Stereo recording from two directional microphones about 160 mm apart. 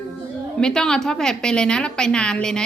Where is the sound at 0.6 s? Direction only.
5° left (ahead or behind).